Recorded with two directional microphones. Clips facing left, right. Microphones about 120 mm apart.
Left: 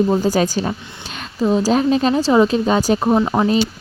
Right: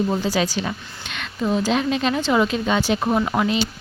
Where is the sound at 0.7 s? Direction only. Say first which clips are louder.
Left 4 dB; 35° left (ahead or behind).